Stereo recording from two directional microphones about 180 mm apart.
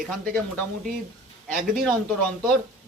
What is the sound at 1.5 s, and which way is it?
Speech, 50° right (ahead or behind).